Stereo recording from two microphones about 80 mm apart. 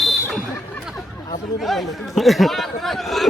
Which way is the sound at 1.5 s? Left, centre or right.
Centre.